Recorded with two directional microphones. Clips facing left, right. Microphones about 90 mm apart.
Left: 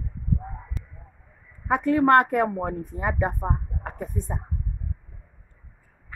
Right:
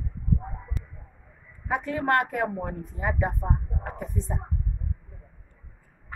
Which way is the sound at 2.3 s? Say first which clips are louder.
Left 5 dB; 60° left (ahead or behind).